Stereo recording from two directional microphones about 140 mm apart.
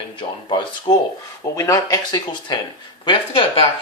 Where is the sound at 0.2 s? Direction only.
35° left (ahead or behind).